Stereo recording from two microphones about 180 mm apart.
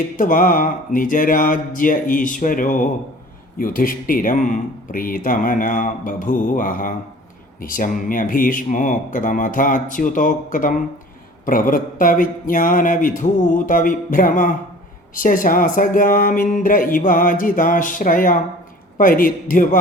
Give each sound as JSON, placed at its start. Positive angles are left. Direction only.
{"t": 0.2, "sound": "speech", "side_deg": 50}